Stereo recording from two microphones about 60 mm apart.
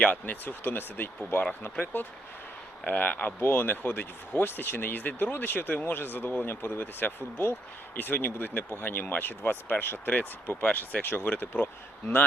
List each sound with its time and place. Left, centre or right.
0.0 s speech: left